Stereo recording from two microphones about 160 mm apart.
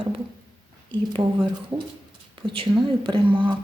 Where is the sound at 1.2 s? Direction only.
30° right (ahead or behind).